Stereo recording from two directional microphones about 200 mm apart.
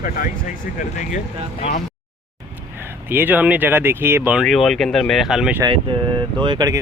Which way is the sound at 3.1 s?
10° right (ahead or behind).